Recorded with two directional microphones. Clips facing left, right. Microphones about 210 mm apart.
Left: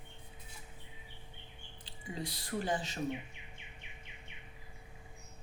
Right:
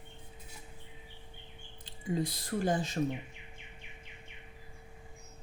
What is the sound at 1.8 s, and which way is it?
Speech, 45° right (ahead or behind).